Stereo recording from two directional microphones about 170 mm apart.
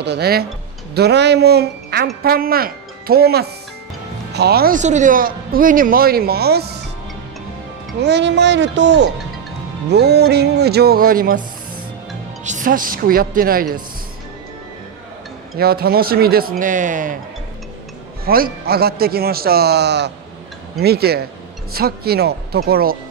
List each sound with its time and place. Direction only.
0.0 s speech: 75° right (ahead or behind)
0.9 s speech: 80° right
2.2 s speech: 60° right (ahead or behind)
4.7 s speech: 45° right (ahead or behind); by 6.8 s 70° right (ahead or behind)
8.0 s speech: 90° right
9.8 s speech: 75° right (ahead or behind); by 13.7 s 60° right (ahead or behind)
15.5 s speech: 65° right (ahead or behind)
18.2 s speech: 60° right (ahead or behind); by 20.1 s 80° right
20.8 s speech: 70° right (ahead or behind)